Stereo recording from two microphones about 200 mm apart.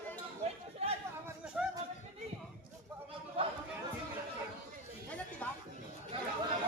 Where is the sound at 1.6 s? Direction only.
5° right (ahead or behind).